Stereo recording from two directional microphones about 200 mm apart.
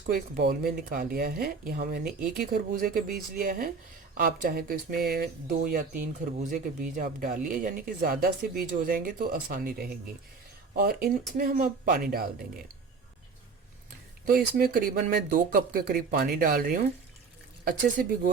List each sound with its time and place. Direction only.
0.1 s speech: 45° right (ahead or behind)
14.3 s speech: 45° right (ahead or behind)
18.0 s speech: 45° right (ahead or behind)